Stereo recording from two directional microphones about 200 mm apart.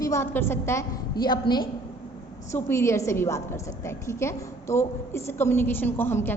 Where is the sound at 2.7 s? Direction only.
15° left (ahead or behind).